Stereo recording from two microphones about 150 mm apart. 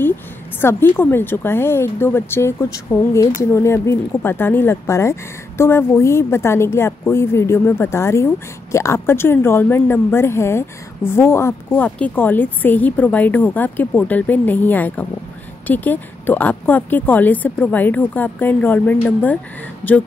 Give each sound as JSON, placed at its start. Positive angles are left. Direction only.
{"t": 0.6, "sound": "speech", "side_deg": 15}